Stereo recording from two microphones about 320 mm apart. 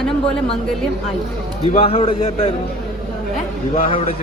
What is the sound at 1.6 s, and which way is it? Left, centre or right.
Speech, centre.